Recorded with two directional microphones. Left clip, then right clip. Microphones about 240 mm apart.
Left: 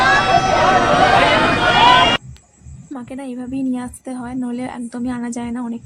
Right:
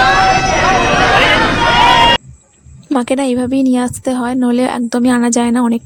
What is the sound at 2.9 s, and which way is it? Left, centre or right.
A woman's voice, right.